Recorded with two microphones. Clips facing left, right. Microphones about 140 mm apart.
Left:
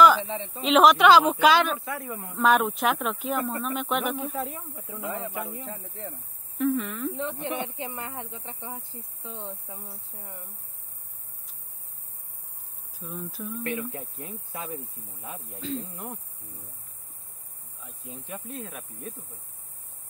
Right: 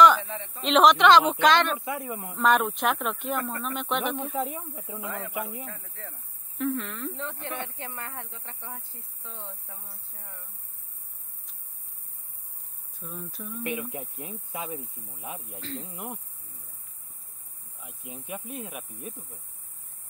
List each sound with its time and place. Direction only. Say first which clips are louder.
0.2 s speech: left 4 dB; 25° left (ahead or behind)
0.6 s speech: left 1 dB; 5° left (ahead or behind)
1.8 s speech: right 1 dB; 20° right (ahead or behind)
2.3 s speech: left 1 dB; centre (ahead or behind)
4.3 s speech: right 2 dB; 20° right (ahead or behind)
5.0 s speech: left 2 dB; 20° left (ahead or behind)
6.6 s speech: left 4 dB; centre (ahead or behind)
7.2 s speech: left 5 dB; 15° left (ahead or behind)
13.0 s speech: left 3 dB; centre (ahead or behind)
13.7 s speech: right 1 dB; 20° right (ahead or behind)
15.6 s speech: left 6 dB; centre (ahead or behind)
17.8 s speech: right 1 dB; 10° right (ahead or behind)